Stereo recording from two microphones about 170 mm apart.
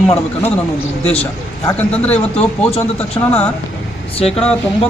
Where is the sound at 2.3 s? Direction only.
35° left (ahead or behind).